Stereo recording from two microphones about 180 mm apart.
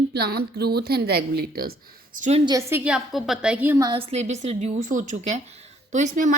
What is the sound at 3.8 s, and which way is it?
Speech, 30° right (ahead or behind).